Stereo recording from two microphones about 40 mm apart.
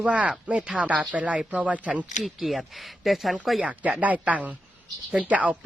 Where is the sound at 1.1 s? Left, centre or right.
Right.